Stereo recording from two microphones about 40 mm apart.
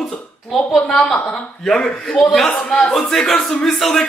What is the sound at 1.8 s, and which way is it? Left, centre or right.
Speech, centre.